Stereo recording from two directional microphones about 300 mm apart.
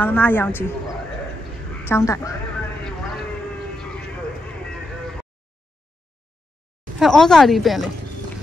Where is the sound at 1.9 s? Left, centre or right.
Centre.